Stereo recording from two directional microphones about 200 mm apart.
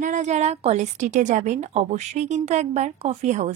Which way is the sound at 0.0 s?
40° right (ahead or behind).